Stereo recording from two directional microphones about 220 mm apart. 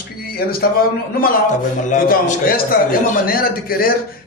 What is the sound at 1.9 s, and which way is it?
Speech, 40° left (ahead or behind).